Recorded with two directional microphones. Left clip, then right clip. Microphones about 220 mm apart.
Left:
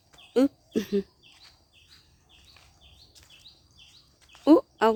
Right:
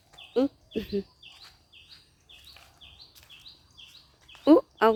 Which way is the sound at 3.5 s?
65° right (ahead or behind).